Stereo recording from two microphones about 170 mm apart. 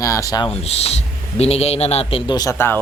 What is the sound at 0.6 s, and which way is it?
A man's voice, 35° left (ahead or behind).